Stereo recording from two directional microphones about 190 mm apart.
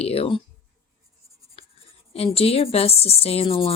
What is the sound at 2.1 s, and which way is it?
Speech, 30° left (ahead or behind).